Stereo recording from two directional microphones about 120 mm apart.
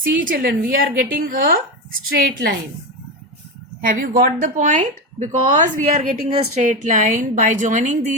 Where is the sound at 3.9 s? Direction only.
90° right; by 6.6 s 60° right (ahead or behind).